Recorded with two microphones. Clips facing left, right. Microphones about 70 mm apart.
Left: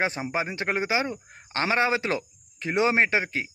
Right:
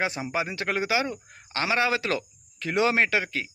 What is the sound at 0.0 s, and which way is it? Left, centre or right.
Speech, left.